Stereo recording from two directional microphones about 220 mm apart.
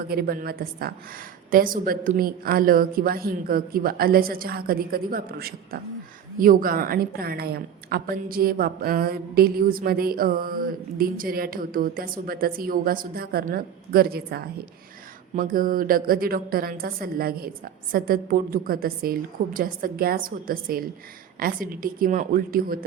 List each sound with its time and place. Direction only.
0.1 s a woman's voice: 45° right (ahead or behind)